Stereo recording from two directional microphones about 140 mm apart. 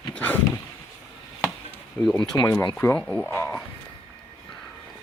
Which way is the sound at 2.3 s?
25° left (ahead or behind).